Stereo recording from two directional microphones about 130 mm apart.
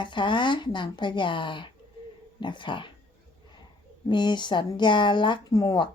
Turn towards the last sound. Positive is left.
turn(degrees=30)  # may be behind; listen again after turning